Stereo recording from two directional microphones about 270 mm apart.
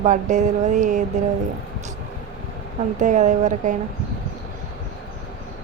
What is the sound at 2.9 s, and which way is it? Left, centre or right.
Speech, right.